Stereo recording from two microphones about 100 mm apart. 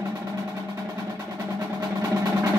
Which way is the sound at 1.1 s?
35° right (ahead or behind).